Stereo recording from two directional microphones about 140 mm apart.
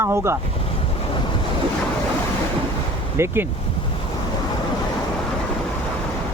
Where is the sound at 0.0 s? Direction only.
20° right (ahead or behind).